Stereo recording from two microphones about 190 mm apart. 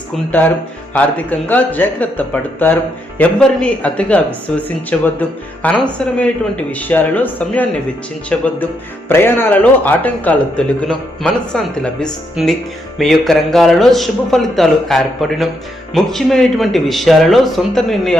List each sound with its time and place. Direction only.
0.3 s a man's voice: 10° left (ahead or behind)